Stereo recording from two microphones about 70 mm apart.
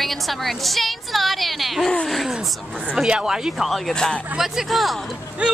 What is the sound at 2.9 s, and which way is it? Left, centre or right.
A woman's voice, centre.